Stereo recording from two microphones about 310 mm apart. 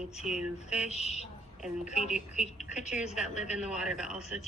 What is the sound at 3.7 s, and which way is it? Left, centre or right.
Speech, centre.